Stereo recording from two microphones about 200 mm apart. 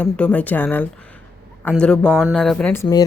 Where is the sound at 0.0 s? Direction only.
5° left (ahead or behind).